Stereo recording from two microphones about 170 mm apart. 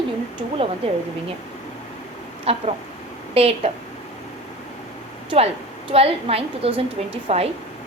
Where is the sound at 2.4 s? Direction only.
35° right (ahead or behind).